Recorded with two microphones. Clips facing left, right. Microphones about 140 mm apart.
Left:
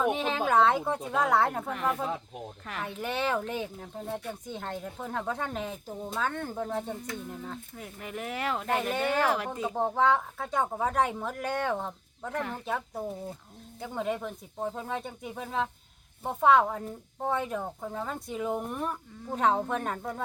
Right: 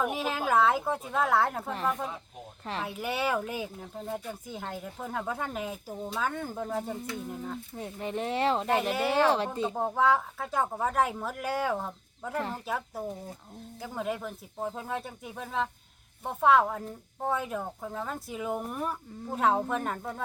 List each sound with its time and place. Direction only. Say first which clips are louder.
0.0 s a woman's voice: left 2 dB; 5° right (ahead or behind)
7.8 s speech: right 7 dB; 30° right (ahead or behind)
8.9 s a woman's voice: right 1 dB; 5° right (ahead or behind)
9.1 s speech: right 3 dB; 30° right (ahead or behind)
9.7 s a woman's voice: left 1 dB; 5° right (ahead or behind)
12.4 s speech: right 1 dB; 30° right (ahead or behind)
12.6 s a woman's voice: left 1 dB; centre (ahead or behind)